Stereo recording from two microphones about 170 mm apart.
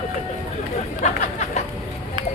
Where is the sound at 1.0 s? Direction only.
45° left (ahead or behind).